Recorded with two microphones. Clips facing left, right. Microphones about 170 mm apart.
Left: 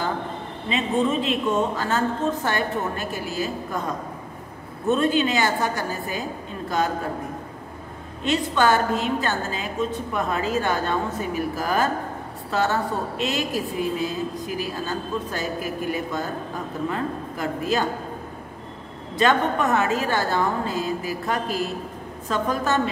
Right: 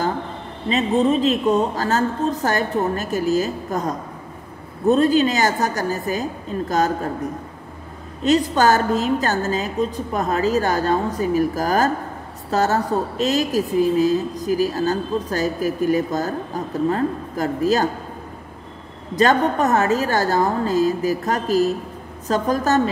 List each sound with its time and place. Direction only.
0.7 s speech: 40° right (ahead or behind)
8.2 s speech: 40° right (ahead or behind)
19.1 s speech: 40° right (ahead or behind)